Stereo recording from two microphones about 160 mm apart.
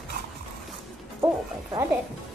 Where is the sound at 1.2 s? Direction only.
30° right (ahead or behind).